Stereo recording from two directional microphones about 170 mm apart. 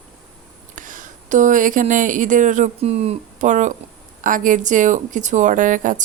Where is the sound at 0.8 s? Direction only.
50° right (ahead or behind).